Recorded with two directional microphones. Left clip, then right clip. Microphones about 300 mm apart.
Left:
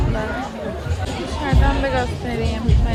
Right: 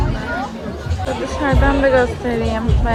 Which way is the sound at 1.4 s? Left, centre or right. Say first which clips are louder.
Right 6 dB; centre.